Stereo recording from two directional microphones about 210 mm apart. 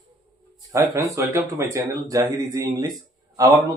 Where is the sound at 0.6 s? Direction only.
15° right (ahead or behind).